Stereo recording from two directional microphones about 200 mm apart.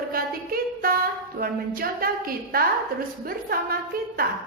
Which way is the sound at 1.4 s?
45° right (ahead or behind).